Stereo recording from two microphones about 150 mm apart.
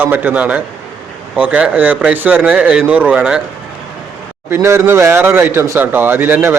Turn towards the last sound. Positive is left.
turn(degrees=-15)  # may be behind; listen again after turning